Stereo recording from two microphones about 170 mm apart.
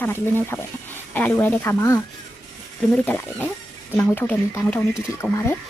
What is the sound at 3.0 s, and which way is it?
Speech, 10° left (ahead or behind).